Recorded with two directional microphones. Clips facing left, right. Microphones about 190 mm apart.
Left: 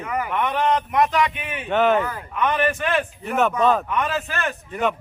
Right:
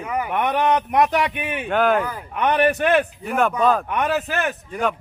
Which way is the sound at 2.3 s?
60° right (ahead or behind).